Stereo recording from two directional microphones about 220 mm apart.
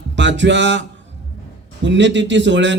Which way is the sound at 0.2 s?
55° right (ahead or behind).